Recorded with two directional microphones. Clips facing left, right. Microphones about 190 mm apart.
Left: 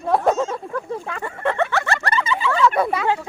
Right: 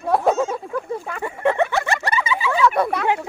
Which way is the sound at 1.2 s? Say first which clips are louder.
Right 3 dB; 15° right (ahead or behind).